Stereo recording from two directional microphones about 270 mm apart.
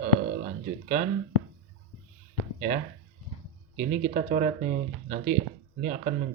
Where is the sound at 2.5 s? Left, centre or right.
Right.